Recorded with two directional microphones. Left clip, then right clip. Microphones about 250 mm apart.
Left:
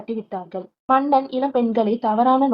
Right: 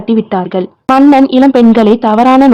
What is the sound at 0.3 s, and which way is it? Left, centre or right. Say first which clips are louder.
Speech: right 16 dB; right.